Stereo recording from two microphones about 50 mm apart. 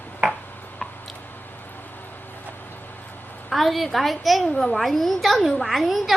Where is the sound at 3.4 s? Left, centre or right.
Centre.